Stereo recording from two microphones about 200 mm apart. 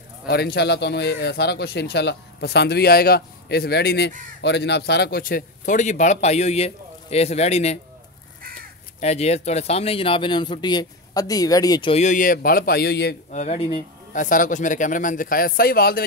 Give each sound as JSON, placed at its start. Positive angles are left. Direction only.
{"t": 0.3, "sound": "a man's voice", "side_deg": 55}
{"t": 9.0, "sound": "speech", "side_deg": 35}
{"t": 11.9, "sound": "speech", "side_deg": 35}
{"t": 13.3, "sound": "a man's voice", "side_deg": 35}